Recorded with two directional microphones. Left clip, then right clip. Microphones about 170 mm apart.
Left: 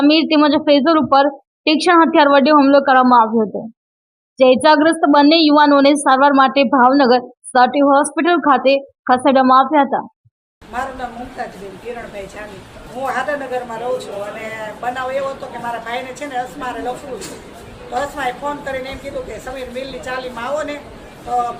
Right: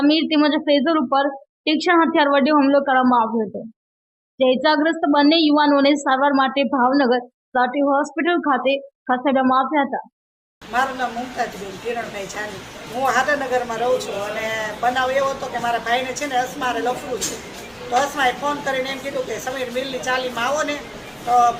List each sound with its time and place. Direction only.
0.0 s a woman's voice: 20° left (ahead or behind)
4.4 s speech: 20° left (ahead or behind)
10.7 s a woman's voice: centre (ahead or behind)
13.0 s a woman's voice: centre (ahead or behind)
17.9 s a woman's voice: centre (ahead or behind)